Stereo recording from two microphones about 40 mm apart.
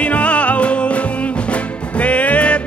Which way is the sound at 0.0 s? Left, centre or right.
Left.